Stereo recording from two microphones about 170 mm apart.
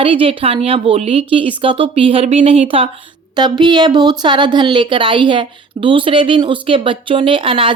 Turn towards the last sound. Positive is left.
turn(degrees=-30)  # may be behind; listen again after turning